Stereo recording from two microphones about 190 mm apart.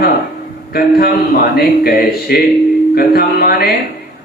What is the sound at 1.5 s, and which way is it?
A man's voice, 55° left (ahead or behind).